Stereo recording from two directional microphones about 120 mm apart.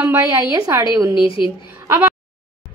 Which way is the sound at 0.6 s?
25° right (ahead or behind).